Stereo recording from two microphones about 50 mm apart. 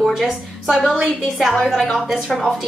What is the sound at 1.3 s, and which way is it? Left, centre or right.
Speech, centre.